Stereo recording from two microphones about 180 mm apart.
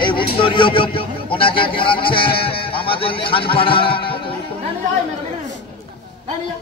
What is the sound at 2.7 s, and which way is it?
Speech, 30° left (ahead or behind).